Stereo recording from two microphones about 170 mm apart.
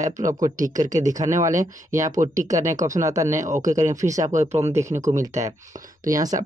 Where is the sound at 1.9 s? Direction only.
20° right (ahead or behind).